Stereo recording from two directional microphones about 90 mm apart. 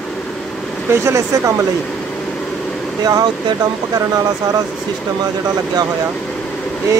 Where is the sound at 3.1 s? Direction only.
45° right (ahead or behind).